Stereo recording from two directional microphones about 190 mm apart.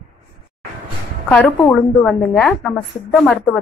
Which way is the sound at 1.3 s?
10° left (ahead or behind).